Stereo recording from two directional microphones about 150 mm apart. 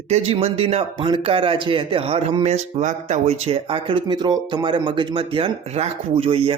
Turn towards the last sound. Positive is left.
turn(degrees=-40)  # may be behind; listen again after turning